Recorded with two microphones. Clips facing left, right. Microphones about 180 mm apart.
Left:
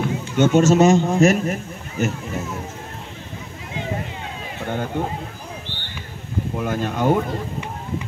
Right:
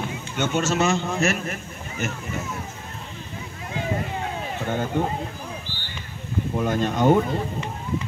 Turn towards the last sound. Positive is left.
turn(degrees=10)  # may be behind; listen again after turning